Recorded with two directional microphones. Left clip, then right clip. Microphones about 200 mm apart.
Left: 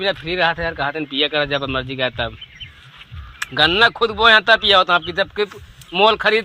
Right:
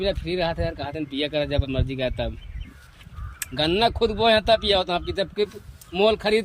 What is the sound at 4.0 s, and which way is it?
Speech, 20° left (ahead or behind).